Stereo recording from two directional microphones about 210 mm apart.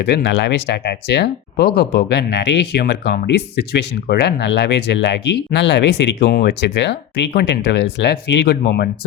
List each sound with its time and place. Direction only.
0.0 s speech: 50° left (ahead or behind)